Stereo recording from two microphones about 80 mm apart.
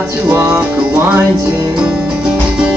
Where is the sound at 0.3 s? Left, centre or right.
Centre.